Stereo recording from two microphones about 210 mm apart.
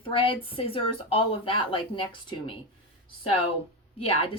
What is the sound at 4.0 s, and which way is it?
Speech, 25° left (ahead or behind).